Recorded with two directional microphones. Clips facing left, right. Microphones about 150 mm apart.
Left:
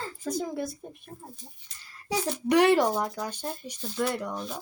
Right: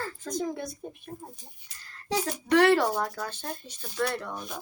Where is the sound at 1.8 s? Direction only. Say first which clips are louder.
Right 1 dB; 10° left (ahead or behind).